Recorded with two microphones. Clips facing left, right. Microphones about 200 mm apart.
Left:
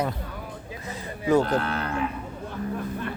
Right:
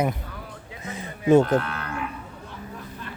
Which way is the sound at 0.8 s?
25° right (ahead or behind).